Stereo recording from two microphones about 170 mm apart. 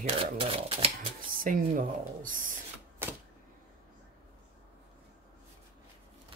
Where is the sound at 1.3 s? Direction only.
55° right (ahead or behind).